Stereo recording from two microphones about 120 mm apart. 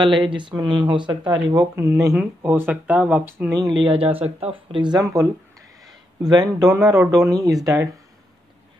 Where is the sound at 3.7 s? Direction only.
45° right (ahead or behind).